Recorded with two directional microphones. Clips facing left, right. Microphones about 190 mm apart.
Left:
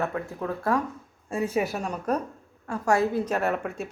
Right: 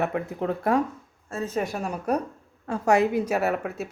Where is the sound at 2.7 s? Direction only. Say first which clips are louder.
Right 3 dB; 20° right (ahead or behind); by 3.8 s 5° right (ahead or behind).